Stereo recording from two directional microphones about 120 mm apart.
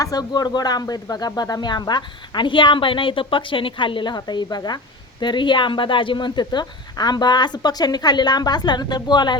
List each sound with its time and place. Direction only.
0.0 s speech: 30° left (ahead or behind)